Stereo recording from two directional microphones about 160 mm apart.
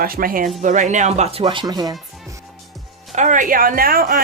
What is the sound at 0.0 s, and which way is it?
Speech, 65° right (ahead or behind).